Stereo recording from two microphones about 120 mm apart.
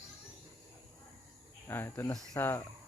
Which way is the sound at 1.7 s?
20° left (ahead or behind).